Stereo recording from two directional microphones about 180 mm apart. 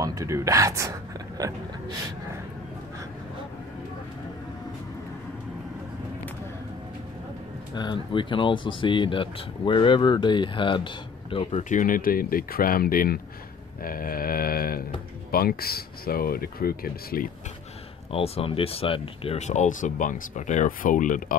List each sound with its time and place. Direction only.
0.0 s speech: 20° right (ahead or behind)
7.7 s speech: 25° left (ahead or behind)
11.7 s speech: 50° left (ahead or behind)
13.8 s a sound: 55° left (ahead or behind)
15.3 s speech: 55° left (ahead or behind)
18.1 s speech: 35° left (ahead or behind)